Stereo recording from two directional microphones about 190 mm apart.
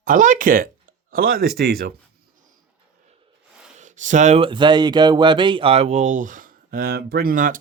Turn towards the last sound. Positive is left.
turn(degrees=-45)  # may be behind; listen again after turning